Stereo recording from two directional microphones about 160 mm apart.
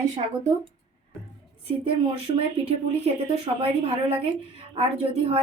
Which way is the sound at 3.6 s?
40° right (ahead or behind).